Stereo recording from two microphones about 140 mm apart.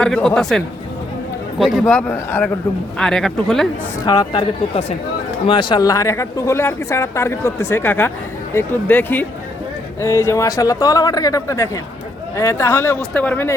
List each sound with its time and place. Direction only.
0.0 s speech: 5° left (ahead or behind)
4.0 s speech: 30° left (ahead or behind); by 13.5 s 10° left (ahead or behind)